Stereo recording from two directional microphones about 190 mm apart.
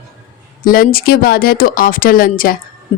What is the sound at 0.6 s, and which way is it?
A woman's voice, 50° left (ahead or behind).